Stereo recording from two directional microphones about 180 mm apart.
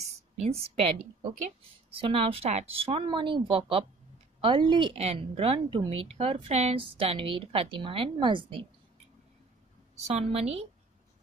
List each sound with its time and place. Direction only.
0.0 s a sound: 35° right (ahead or behind)
1.9 s a woman's voice: 30° right (ahead or behind)
10.0 s a woman's voice: 35° right (ahead or behind)